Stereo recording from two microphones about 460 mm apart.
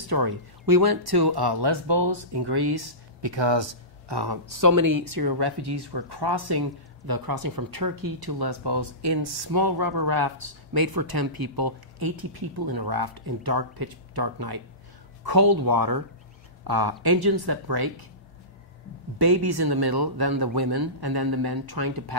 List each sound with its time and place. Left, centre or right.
0.1 s speech: right
19.1 s speech: right